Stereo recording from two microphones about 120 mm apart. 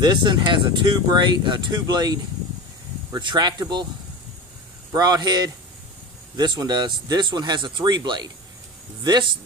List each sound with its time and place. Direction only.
0.0 s speech: 35° right (ahead or behind)
4.9 s speech: 35° right (ahead or behind)